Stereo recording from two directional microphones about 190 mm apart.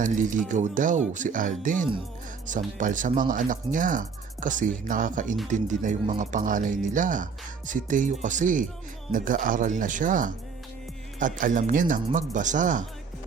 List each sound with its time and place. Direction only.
0.0 s speech: 40° right (ahead or behind)